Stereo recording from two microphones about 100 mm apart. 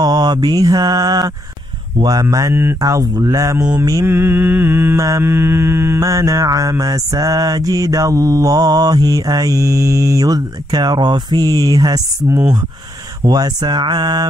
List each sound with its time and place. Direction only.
0.0 s mantra: 45° right (ahead or behind)
2.2 s mantra: 30° right (ahead or behind)
2.8 s mantra: 40° right (ahead or behind)
4.0 s mantra: 20° right (ahead or behind); by 12.0 s 40° right (ahead or behind)
13.2 s speech: 45° right (ahead or behind)